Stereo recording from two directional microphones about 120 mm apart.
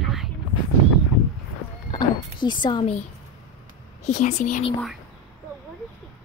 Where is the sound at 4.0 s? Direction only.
80° left.